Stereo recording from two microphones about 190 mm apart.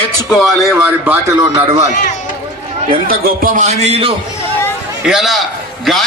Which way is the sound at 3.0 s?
50° right (ahead or behind).